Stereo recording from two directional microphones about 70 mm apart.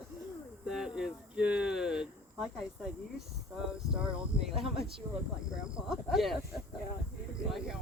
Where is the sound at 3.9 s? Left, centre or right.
Centre.